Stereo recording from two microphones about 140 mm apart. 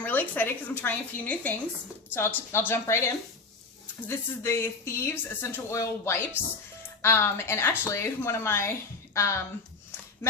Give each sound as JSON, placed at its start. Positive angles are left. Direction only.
{"t": 0.0, "sound": "a woman's voice", "side_deg": 15}